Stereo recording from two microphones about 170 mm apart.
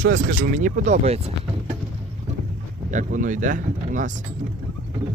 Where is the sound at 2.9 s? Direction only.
50° right (ahead or behind).